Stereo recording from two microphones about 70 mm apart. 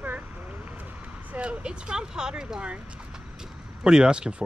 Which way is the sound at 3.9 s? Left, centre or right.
Centre.